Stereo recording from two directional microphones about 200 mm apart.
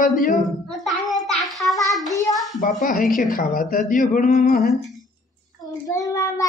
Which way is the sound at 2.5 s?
40° left (ahead or behind).